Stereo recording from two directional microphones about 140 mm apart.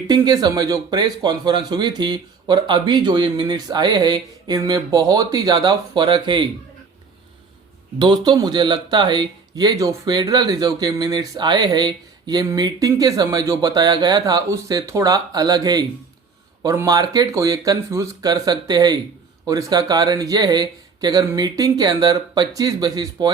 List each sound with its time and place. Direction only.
0.1 s speech: 30° right (ahead or behind)
7.9 s speech: 30° right (ahead or behind)